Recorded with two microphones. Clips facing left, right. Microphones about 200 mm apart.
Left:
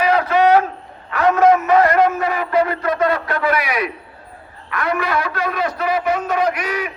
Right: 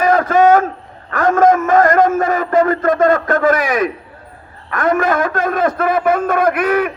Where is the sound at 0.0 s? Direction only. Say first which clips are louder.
Right 3 dB; 45° right (ahead or behind).